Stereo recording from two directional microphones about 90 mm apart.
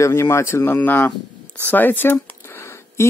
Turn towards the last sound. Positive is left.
turn(degrees=30)  # may be behind; listen again after turning